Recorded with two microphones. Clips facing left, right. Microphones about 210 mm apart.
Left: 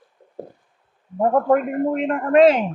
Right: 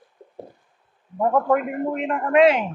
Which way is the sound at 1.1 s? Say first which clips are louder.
Left 3 dB; 35° left (ahead or behind).